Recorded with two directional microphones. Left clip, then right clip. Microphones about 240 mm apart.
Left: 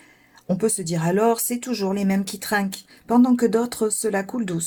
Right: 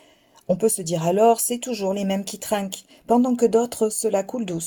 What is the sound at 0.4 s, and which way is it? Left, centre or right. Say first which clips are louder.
Speech: right 2 dB; right.